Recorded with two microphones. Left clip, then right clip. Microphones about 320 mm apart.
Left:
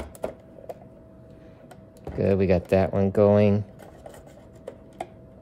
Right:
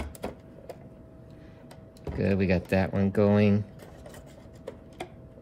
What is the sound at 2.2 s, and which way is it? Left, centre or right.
Speech, left.